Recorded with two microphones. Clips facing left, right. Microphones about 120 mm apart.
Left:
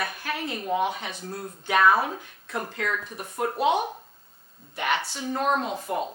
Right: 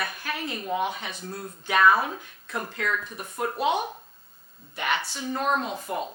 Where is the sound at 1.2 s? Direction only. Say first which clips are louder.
Left 1 dB; 35° left (ahead or behind).